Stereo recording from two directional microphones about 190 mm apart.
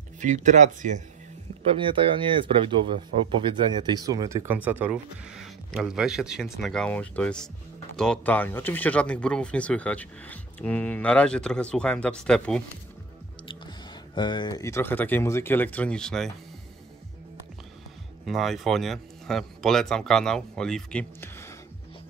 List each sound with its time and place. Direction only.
0.2 s speech: 40° right (ahead or behind)
1.7 s speech: 25° right (ahead or behind); by 12.6 s 5° left (ahead or behind)
14.1 s speech: 25° left (ahead or behind); by 16.3 s 5° left (ahead or behind)
18.2 s speech: centre (ahead or behind)